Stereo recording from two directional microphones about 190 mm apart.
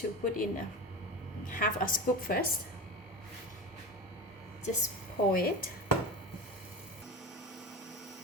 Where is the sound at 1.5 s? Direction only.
45° left (ahead or behind).